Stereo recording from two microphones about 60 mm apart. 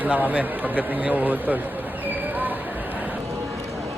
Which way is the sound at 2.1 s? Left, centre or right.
Right.